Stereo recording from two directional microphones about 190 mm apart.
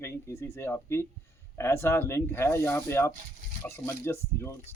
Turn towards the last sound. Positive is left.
turn(degrees=15)  # may be behind; listen again after turning